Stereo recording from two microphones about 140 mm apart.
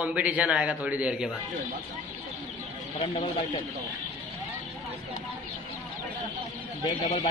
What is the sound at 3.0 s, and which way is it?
Speech, 40° left (ahead or behind).